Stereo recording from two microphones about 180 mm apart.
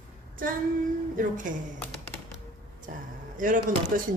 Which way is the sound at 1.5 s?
45° right (ahead or behind).